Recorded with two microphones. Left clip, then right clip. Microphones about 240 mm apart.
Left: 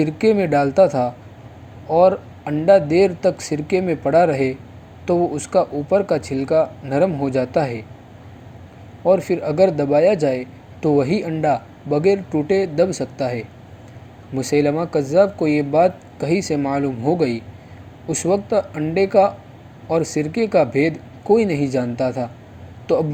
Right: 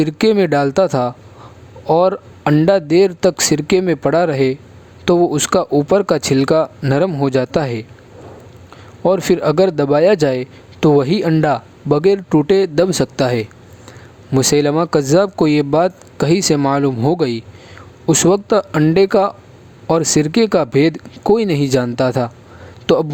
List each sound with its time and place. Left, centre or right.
0.0 s a man's voice: right
9.0 s a man's voice: right